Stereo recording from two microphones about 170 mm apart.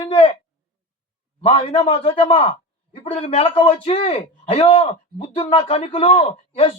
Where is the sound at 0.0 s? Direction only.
30° left (ahead or behind).